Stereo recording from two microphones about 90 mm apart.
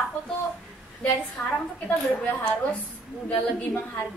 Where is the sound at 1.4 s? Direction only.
25° left (ahead or behind).